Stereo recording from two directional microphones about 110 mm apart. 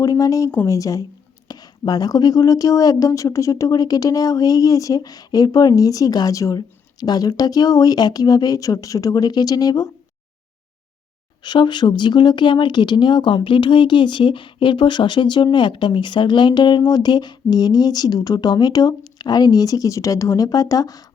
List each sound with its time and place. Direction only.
0.0 s speech: 30° left (ahead or behind)
11.4 s speech: 45° left (ahead or behind)